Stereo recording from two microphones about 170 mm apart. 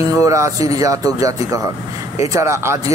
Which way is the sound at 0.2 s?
20° right (ahead or behind).